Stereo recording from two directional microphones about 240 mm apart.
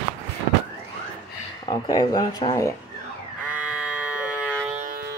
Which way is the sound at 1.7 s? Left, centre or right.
Centre.